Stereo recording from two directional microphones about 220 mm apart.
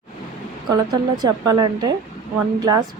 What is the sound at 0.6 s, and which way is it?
A woman's voice, 20° right (ahead or behind).